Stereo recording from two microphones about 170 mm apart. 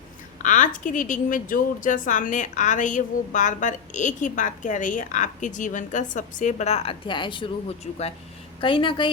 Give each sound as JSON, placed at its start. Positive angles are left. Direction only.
{"t": 0.4, "sound": "a woman's voice", "side_deg": 45}